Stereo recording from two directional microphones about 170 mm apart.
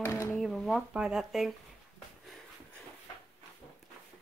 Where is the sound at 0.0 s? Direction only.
15° left (ahead or behind).